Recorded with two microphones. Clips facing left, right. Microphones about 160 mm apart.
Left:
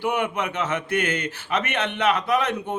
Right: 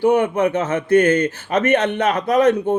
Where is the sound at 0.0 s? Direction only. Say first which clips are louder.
Right 9 dB; 45° right (ahead or behind).